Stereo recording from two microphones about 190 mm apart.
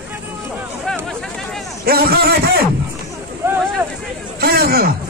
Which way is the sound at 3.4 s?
10° right (ahead or behind).